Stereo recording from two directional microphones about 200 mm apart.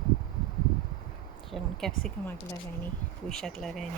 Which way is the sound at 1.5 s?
Centre (ahead or behind).